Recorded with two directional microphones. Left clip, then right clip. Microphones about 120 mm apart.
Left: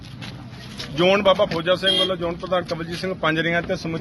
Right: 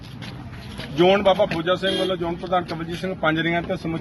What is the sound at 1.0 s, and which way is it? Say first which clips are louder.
Speech: even; 50° left (ahead or behind).